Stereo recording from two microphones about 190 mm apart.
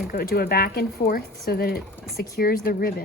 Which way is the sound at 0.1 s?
50° left (ahead or behind).